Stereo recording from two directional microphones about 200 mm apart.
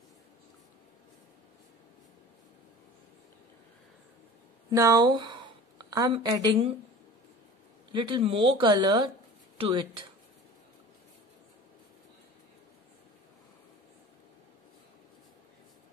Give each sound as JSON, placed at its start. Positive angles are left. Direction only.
{"t": 4.6, "sound": "a woman's voice", "side_deg": -20}
{"t": 7.9, "sound": "speech", "side_deg": -25}